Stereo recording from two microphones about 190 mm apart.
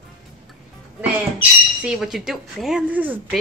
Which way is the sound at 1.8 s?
Centre (ahead or behind).